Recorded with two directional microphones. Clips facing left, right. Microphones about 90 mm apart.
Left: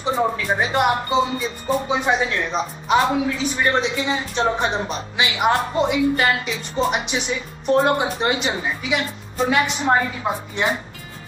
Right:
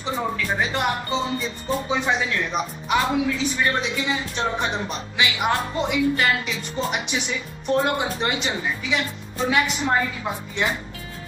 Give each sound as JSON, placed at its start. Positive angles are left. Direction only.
{"t": 0.0, "sound": "a man's voice", "side_deg": 25}